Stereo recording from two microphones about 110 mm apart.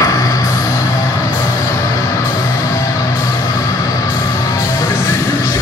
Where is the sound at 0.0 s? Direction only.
35° left (ahead or behind).